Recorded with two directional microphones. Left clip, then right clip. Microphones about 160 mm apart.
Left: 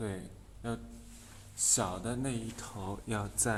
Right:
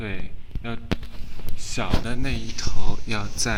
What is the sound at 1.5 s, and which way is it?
Speech, 10° left (ahead or behind).